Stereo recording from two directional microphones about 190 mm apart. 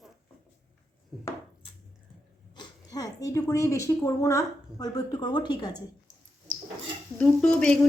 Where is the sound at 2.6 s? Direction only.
20° left (ahead or behind).